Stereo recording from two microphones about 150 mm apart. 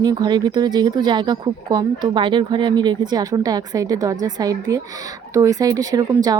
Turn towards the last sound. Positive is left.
turn(degrees=-25)  # may be behind; listen again after turning